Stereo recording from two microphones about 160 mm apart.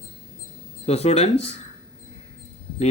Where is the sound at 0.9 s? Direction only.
40° left (ahead or behind).